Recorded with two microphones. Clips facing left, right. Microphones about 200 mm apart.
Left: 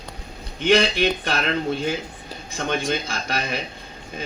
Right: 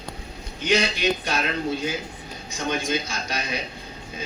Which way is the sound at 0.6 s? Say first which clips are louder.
Left 4 dB; 55° left (ahead or behind).